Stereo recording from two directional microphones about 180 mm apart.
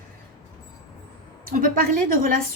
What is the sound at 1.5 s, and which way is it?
Speech, 50° right (ahead or behind).